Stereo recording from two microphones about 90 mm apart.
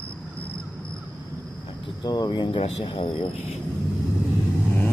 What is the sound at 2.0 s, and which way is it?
Speech, 50° left (ahead or behind).